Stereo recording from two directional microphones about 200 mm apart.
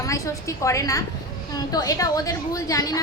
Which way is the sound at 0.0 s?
15° left (ahead or behind).